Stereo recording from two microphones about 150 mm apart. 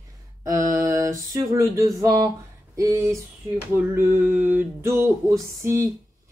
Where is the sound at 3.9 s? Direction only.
15° right (ahead or behind).